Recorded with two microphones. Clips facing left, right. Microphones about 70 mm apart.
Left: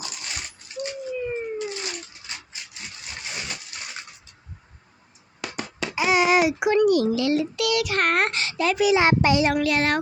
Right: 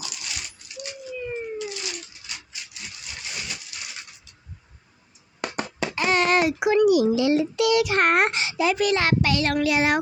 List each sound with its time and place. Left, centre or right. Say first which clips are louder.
0.0 s dog: left 1 dB; left
1.3 s cat: left 2 dB; left
5.9 s babbling: left 2 dB; centre
7.1 s a child's voice: right 2 dB; right
8.7 s a child's voice: left 5 dB; centre
9.0 s a child's voice: left 3 dB; left
9.5 s a child's voice: even; centre
9.7 s a sound: right 1 dB; centre